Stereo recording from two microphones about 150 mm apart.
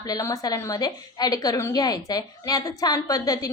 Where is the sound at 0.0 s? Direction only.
25° left (ahead or behind).